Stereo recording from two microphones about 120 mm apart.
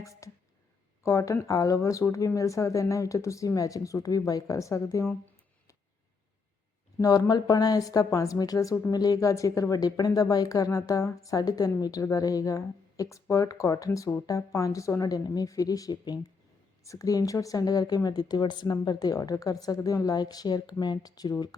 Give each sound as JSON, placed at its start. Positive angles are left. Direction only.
{"t": 0.0, "sound": "a sound", "side_deg": 25}
{"t": 1.0, "sound": "a woman's voice", "side_deg": 25}
{"t": 7.0, "sound": "a woman's voice", "side_deg": 30}